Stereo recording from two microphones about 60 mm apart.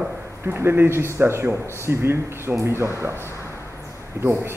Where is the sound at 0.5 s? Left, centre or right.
Right.